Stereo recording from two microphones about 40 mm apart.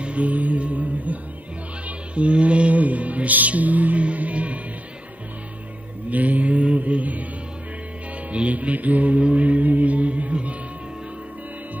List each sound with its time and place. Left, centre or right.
0.0 s music: right
6.0 s mantra: right
8.3 s mantra: right